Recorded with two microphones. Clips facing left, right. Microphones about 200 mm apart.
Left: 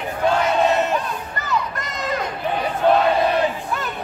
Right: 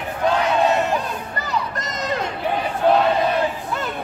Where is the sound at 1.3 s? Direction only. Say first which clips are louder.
Left 2 dB; 35° right (ahead or behind).